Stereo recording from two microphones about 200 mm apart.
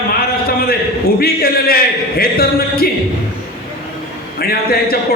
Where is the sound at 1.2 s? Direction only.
50° left (ahead or behind).